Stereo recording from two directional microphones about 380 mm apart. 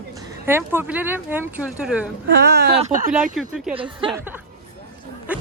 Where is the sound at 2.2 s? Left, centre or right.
Right.